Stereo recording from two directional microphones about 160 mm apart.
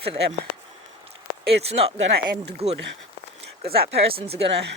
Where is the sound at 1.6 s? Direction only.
40° right (ahead or behind).